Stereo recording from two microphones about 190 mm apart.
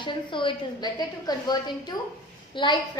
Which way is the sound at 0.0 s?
25° left (ahead or behind).